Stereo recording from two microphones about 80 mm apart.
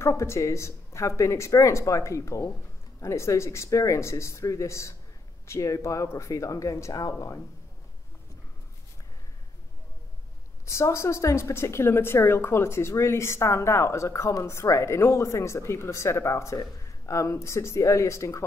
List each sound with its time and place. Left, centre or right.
0.0 s a woman's voice: left
10.6 s a woman's voice: left